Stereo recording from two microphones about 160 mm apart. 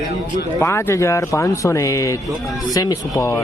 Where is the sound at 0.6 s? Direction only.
15° left (ahead or behind).